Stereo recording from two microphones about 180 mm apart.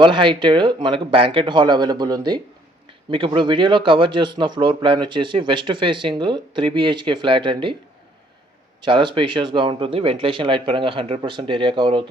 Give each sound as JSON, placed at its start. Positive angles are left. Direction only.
{"t": 0.0, "sound": "a man's voice", "side_deg": -25}
{"t": 8.8, "sound": "a man's voice", "side_deg": -25}